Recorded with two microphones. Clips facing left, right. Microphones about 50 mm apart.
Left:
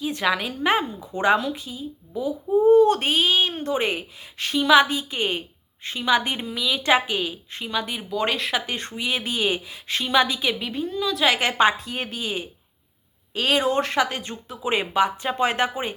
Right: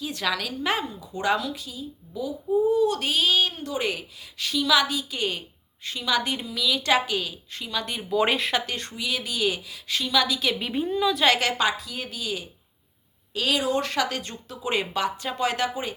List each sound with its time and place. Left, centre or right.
0.0 s speech: left
2.6 s a child's voice: left; by 7.9 s centre
8.1 s speech: centre
8.6 s a child's voice: left
10.6 s a woman's voice: centre
11.1 s speech: centre
11.3 s a child's voice: left